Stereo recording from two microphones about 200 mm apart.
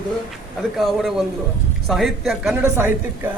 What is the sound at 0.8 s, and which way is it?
A woman's voice, centre (ahead or behind).